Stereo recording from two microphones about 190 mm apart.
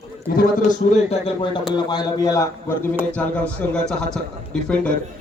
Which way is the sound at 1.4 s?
25° left (ahead or behind).